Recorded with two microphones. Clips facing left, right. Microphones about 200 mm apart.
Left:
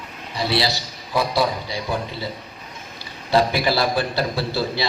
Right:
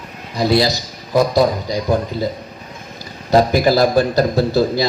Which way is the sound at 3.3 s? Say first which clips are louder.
Right 6 dB; 45° right (ahead or behind).